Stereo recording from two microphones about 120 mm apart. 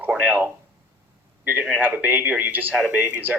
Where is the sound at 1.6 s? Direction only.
15° right (ahead or behind).